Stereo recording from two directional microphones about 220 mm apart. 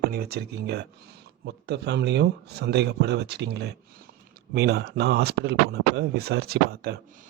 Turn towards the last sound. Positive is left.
turn(degrees=-45)  # may be behind; listen again after turning